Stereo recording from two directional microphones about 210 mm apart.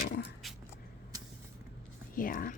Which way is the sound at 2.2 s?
40° left (ahead or behind).